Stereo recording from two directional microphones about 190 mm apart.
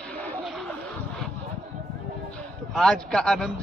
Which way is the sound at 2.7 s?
Centre (ahead or behind).